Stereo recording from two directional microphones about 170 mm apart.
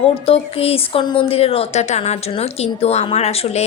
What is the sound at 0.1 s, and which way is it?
A woman's voice, 35° left (ahead or behind).